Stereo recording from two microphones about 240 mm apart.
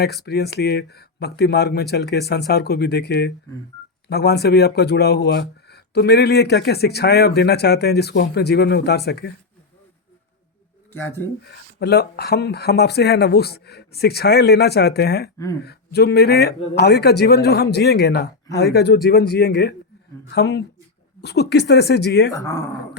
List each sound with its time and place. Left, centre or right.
0.0 s speech: left
10.9 s speech: centre
11.8 s speech: left
22.3 s speech: centre